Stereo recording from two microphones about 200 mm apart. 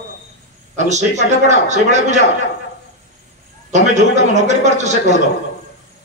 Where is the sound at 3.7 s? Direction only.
35° right (ahead or behind).